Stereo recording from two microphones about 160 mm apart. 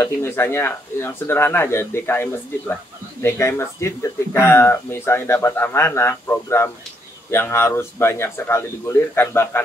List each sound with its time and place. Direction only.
0.0 s speech: 15° left (ahead or behind)